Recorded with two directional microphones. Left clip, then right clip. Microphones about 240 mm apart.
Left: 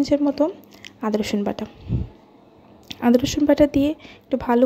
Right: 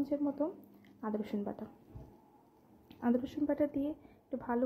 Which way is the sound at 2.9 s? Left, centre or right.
Left.